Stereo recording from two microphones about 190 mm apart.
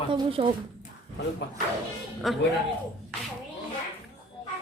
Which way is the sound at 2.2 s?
Centre (ahead or behind).